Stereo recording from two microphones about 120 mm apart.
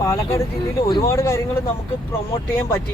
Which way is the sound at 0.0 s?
25° left (ahead or behind).